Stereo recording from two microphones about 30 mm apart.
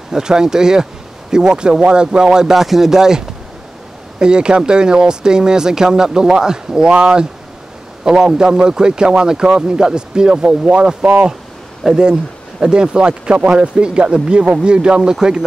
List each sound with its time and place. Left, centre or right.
0.1 s a man's voice: right
2.5 s speech: centre
4.2 s a man's voice: right
6.9 s speech: right
8.0 s a man's voice: right
11.9 s a man's voice: right